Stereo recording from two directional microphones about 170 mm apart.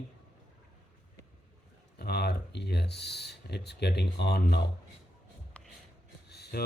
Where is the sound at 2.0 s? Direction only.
70° left (ahead or behind).